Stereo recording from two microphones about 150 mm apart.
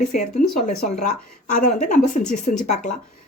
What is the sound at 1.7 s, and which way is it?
Speech, 55° left (ahead or behind).